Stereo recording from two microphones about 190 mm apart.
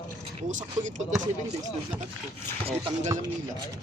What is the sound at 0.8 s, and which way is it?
Speech, 40° right (ahead or behind).